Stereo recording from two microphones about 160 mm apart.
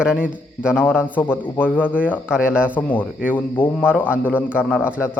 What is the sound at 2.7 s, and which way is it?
A man's voice, 10° left (ahead or behind).